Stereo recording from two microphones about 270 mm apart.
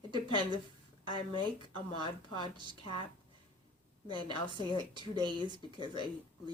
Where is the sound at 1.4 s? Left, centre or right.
Centre.